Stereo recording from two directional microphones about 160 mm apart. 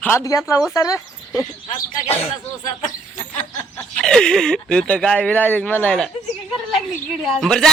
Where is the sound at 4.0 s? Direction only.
5° left (ahead or behind).